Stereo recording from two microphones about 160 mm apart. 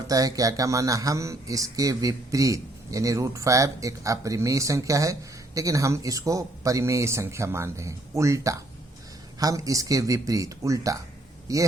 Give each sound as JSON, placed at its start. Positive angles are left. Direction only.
{"t": 0.1, "sound": "speech", "side_deg": -20}